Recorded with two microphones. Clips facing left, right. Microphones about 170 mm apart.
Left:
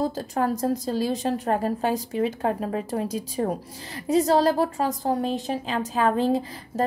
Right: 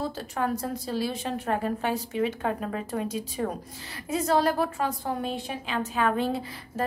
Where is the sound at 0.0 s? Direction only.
40° left (ahead or behind).